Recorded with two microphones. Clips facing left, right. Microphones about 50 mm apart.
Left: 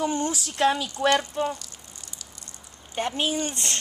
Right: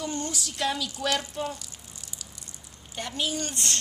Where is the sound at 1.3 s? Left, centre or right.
Centre.